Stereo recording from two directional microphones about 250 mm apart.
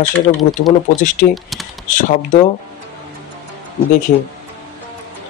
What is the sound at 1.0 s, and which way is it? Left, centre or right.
Speech, left.